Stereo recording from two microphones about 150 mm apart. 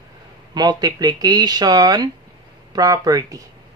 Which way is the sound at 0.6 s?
25° right (ahead or behind).